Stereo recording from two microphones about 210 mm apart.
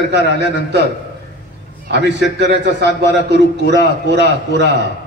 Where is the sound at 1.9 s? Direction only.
55° right (ahead or behind).